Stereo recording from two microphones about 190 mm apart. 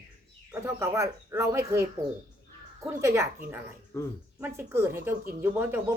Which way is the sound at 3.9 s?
10° left (ahead or behind).